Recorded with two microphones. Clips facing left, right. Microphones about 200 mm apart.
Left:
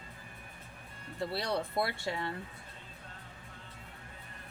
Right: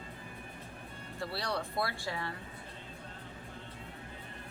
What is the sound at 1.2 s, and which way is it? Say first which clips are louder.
A woman's voice: left 3 dB; 20° left (ahead or behind).